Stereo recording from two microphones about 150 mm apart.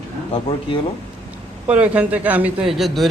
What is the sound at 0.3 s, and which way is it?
Speech, 35° left (ahead or behind).